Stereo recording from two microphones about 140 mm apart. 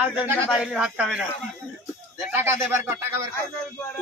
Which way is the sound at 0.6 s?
5° right (ahead or behind).